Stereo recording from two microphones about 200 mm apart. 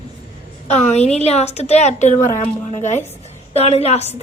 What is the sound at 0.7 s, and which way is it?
A woman's voice, 35° left (ahead or behind).